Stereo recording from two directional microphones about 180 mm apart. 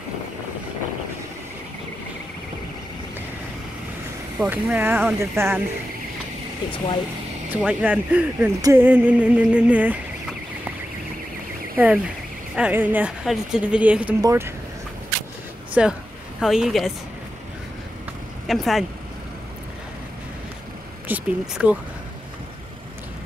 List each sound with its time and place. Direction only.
4.4 s speech: 10° right (ahead or behind)
7.5 s speech: 10° right (ahead or behind)
8.5 s a sound: 20° right (ahead or behind)
8.8 s speech: 10° right (ahead or behind)
11.7 s speech: 10° right (ahead or behind)
15.8 s speech: 5° right (ahead or behind)
18.5 s speech: centre (ahead or behind)
21.1 s speech: 5° right (ahead or behind)